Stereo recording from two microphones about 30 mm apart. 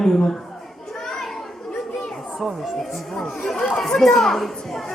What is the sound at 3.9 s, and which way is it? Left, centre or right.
Speech, centre.